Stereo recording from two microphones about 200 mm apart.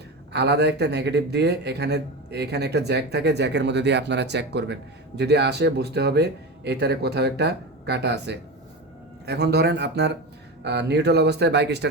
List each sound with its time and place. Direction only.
0.3 s a man's voice: 55° right (ahead or behind)